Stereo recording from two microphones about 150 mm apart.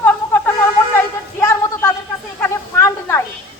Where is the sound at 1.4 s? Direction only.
20° left (ahead or behind).